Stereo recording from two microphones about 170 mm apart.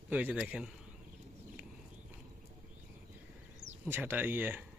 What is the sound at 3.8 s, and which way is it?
Speech, 10° right (ahead or behind).